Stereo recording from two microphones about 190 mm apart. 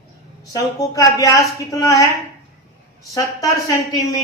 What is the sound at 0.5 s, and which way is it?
A woman's voice, 20° left (ahead or behind).